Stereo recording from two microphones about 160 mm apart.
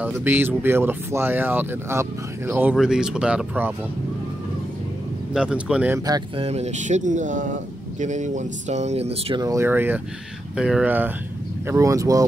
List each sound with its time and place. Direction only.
0.0 s speech: 10° right (ahead or behind)
5.3 s speech: 5° right (ahead or behind)
6.0 s speech: 25° right (ahead or behind)
6.4 s speech: 40° right (ahead or behind)
9.4 s speech: 20° right (ahead or behind)